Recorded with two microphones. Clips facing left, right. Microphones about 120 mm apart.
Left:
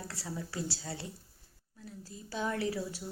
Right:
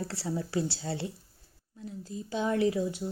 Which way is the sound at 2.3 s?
25° right (ahead or behind).